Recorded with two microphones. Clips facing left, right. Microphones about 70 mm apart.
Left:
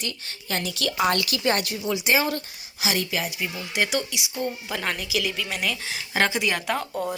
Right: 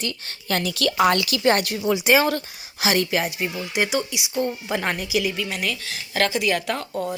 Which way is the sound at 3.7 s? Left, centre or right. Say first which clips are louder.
Right 2 dB; centre.